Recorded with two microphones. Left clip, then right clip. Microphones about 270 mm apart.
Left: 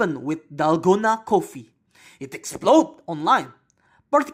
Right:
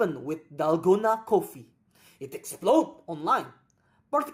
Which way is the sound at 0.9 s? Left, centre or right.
Left.